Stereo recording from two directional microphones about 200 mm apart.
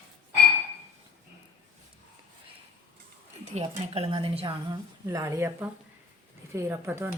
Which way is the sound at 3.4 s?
30° right (ahead or behind).